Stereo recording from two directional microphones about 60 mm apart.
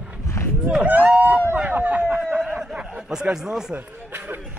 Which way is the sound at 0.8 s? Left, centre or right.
Right.